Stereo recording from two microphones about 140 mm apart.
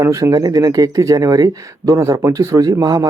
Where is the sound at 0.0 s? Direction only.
25° right (ahead or behind).